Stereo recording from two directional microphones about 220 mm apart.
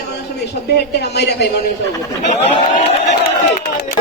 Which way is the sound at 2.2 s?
30° left (ahead or behind).